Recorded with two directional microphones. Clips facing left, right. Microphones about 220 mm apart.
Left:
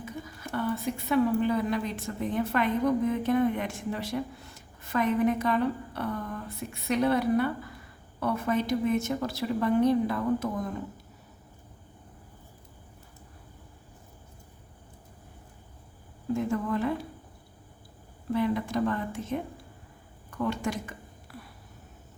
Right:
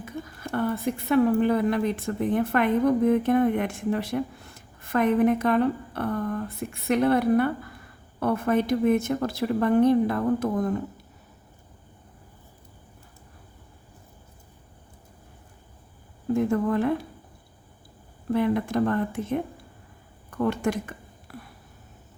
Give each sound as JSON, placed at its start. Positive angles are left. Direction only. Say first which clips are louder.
{"t": 0.0, "sound": "a woman's voice", "louder": "right 3 dB", "side_deg": -55}
{"t": 16.3, "sound": "a woman's voice", "louder": "right 5 dB", "side_deg": -55}
{"t": 18.3, "sound": "a woman's voice", "louder": "right 4 dB", "side_deg": -55}
{"t": 20.4, "sound": "speech", "louder": "right 5 dB", "side_deg": -55}